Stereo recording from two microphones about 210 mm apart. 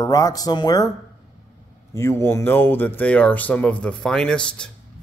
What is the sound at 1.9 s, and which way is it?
Speech, 10° left (ahead or behind).